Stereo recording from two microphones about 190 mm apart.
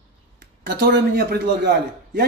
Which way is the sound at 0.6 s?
55° right (ahead or behind).